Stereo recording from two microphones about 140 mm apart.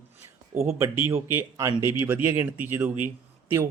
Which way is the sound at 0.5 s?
15° right (ahead or behind).